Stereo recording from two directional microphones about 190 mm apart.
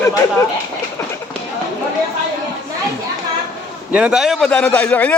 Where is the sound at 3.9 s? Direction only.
5° right (ahead or behind).